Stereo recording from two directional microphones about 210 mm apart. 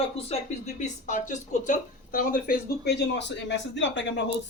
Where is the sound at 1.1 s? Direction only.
35° left (ahead or behind).